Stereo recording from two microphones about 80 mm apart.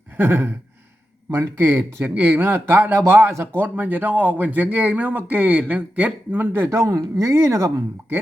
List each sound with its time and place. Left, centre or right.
0.2 s a man's voice: right